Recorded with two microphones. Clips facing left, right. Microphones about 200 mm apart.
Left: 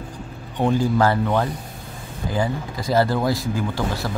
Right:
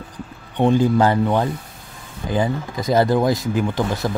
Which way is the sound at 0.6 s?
20° right (ahead or behind).